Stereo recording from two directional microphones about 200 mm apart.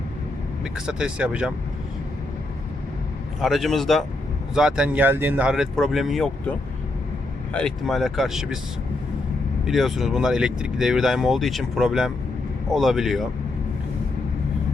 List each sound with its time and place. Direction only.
0.6 s speech: 5° right (ahead or behind)
3.4 s speech: centre (ahead or behind)
9.6 s speech: centre (ahead or behind)